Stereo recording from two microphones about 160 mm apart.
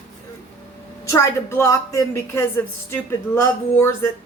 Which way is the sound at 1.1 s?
20° left (ahead or behind).